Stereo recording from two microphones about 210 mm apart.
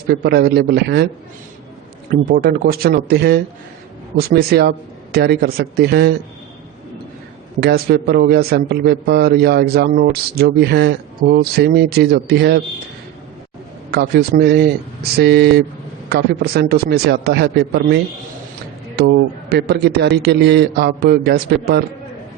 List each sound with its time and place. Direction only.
0.1 s a man's voice: 50° right (ahead or behind)
2.0 s a man's voice: 45° right (ahead or behind)
7.6 s a man's voice: 45° right (ahead or behind)
13.9 s a man's voice: 50° right (ahead or behind)